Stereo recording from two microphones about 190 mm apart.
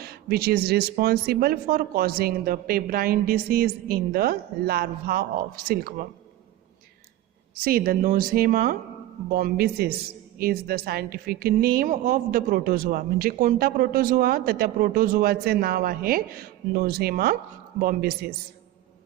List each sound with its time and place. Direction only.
0.0 s a woman's voice: 55° right (ahead or behind)
7.5 s a woman's voice: 50° right (ahead or behind)